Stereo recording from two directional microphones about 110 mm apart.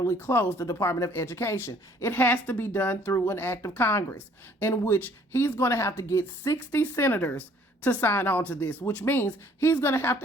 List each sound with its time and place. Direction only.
0.0 s speech: 25° left (ahead or behind)